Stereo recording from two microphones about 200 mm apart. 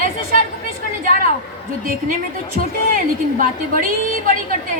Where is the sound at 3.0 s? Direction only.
45° right (ahead or behind).